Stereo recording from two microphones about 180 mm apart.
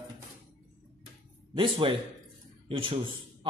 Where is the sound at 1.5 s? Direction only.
30° right (ahead or behind).